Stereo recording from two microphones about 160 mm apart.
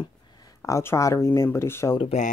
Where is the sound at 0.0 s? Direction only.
25° left (ahead or behind).